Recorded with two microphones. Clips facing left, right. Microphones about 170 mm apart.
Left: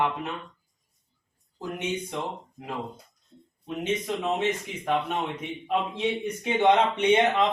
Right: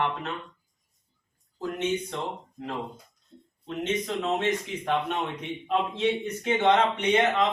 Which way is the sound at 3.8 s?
10° left (ahead or behind).